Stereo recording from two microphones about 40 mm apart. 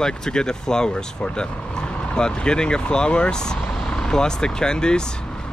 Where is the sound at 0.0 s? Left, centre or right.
Centre.